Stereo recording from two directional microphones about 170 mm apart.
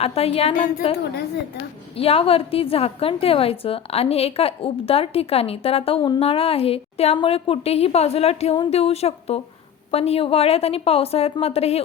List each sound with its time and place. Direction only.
0.0 s a woman's voice: 35° left (ahead or behind)